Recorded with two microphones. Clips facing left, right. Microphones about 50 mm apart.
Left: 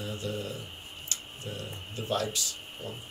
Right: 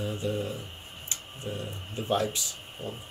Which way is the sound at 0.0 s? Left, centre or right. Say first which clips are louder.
Right 4 dB; right.